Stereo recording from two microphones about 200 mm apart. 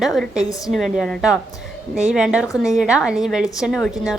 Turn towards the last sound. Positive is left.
turn(degrees=0)  # may be behind; listen again after turning